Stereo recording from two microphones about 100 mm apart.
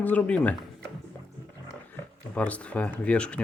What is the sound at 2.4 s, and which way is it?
Speech, 15° left (ahead or behind).